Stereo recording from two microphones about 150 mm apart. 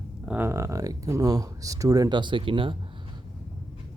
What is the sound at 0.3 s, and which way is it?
Speech, 15° right (ahead or behind).